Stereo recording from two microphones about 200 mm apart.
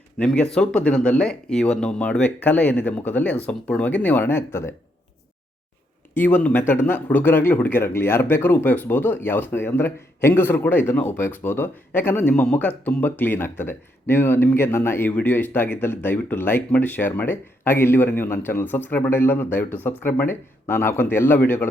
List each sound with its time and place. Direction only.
0.2 s speech: 5° left (ahead or behind)
6.1 s speech: 10° left (ahead or behind)